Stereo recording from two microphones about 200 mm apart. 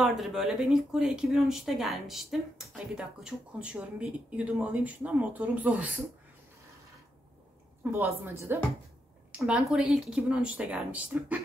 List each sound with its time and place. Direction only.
0.0 s speech: centre (ahead or behind)
7.9 s speech: 10° right (ahead or behind)